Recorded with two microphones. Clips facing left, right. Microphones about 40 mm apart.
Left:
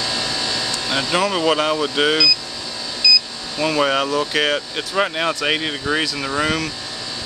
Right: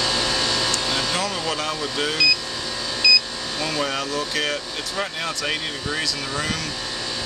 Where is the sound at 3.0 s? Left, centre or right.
Right.